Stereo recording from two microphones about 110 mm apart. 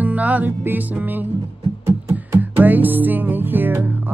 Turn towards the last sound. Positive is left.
turn(degrees=-15)  # may be behind; listen again after turning